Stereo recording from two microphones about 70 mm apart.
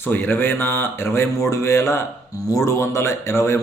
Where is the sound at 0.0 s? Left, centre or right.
Left.